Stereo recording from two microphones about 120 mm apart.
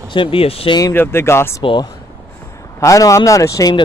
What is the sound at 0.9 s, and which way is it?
Speech, 20° left (ahead or behind).